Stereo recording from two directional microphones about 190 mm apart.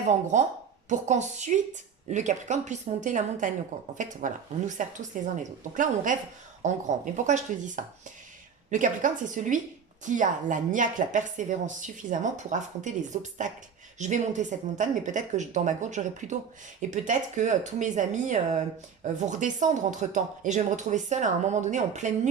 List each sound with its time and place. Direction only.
0.1 s a woman's voice: 35° right (ahead or behind)